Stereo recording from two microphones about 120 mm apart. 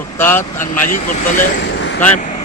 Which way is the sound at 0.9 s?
90° left.